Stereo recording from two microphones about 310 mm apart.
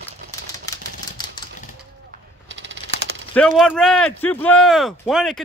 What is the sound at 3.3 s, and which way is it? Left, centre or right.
Speech, centre.